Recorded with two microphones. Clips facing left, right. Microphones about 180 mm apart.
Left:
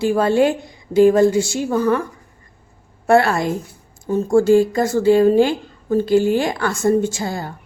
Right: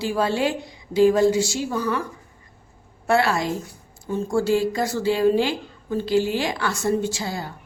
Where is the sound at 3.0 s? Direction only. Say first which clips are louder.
Left 5 dB; 50° left (ahead or behind).